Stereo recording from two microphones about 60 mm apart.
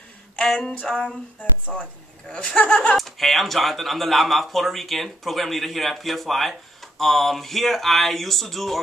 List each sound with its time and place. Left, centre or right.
0.4 s speech: centre
3.0 s speech: centre